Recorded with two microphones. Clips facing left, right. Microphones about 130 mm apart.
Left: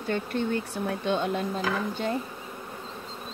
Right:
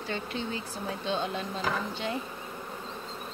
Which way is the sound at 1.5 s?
5° left (ahead or behind).